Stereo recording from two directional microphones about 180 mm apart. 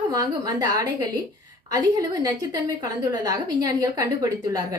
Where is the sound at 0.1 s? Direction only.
20° right (ahead or behind).